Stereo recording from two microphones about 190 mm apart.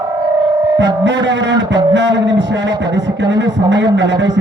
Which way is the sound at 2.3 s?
70° right (ahead or behind).